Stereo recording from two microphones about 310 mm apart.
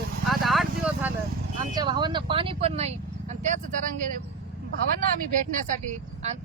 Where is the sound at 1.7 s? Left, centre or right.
Centre.